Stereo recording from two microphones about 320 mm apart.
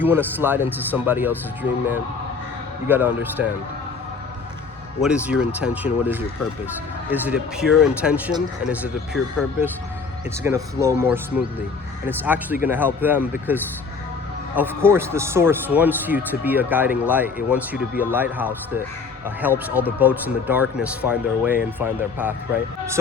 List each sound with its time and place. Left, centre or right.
0.0 s speech: centre
2.8 s speech: centre
4.9 s speech: centre